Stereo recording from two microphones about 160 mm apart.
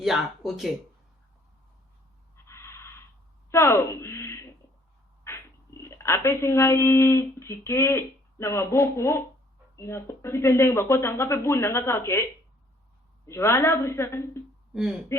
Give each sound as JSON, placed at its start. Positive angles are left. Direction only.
{"t": 0.0, "sound": "speech", "side_deg": 0}
{"t": 2.3, "sound": "a sound", "side_deg": 15}
{"t": 3.5, "sound": "speech", "side_deg": 15}
{"t": 14.7, "sound": "speech", "side_deg": -5}